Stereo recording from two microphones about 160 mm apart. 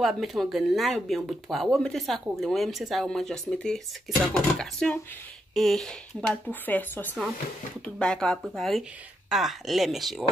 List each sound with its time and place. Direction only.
0.0 s speech: centre (ahead or behind)